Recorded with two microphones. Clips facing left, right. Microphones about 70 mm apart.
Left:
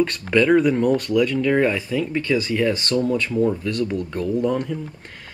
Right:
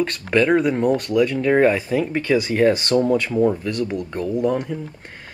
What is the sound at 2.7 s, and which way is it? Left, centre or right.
Speech, right.